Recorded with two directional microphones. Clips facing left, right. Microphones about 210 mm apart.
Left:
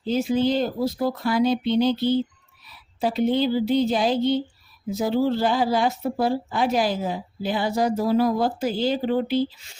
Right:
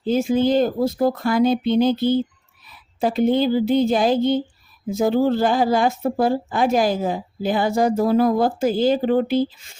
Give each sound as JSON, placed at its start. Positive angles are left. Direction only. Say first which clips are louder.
{"t": 0.0, "sound": "a woman's voice", "louder": "right 3 dB", "side_deg": -50}